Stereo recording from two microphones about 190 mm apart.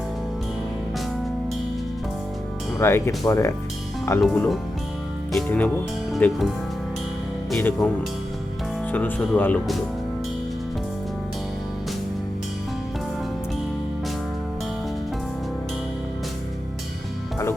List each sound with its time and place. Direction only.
2.7 s speech: 15° left (ahead or behind)
4.2 s speech: centre (ahead or behind)
7.5 s speech: 5° left (ahead or behind)
8.9 s speech: 10° left (ahead or behind)